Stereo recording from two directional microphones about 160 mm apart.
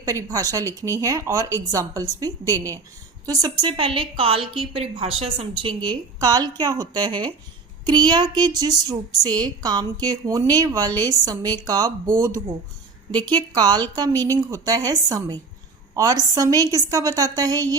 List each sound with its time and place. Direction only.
0.0 s a woman's voice: 20° right (ahead or behind)